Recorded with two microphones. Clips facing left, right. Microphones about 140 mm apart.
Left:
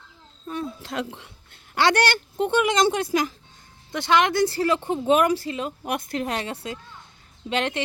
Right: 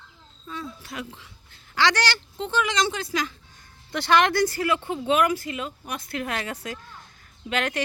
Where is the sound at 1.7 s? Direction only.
55° left (ahead or behind).